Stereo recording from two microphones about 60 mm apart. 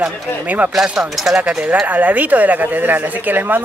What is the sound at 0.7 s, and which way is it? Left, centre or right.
Speech, centre.